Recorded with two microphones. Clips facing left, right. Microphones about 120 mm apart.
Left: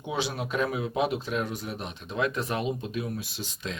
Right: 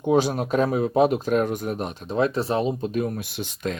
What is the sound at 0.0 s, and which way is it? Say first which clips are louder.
Speech: right 10 dB; 45° right (ahead or behind).